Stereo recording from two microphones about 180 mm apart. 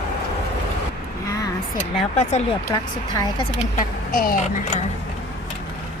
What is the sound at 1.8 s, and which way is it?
Speech, 35° left (ahead or behind).